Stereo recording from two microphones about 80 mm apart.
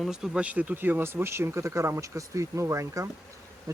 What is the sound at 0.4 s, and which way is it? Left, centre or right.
Speech, centre.